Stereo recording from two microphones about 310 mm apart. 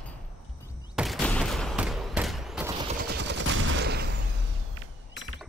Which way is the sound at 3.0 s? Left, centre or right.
Right.